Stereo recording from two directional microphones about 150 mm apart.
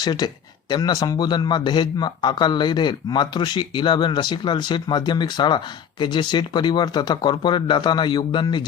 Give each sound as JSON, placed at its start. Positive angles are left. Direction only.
{"t": 0.0, "sound": "a man's voice", "side_deg": 30}